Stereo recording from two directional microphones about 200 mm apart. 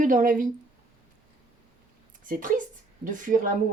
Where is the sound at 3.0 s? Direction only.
40° right (ahead or behind).